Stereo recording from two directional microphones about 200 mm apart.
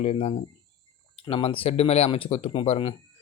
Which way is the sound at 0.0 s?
30° left (ahead or behind).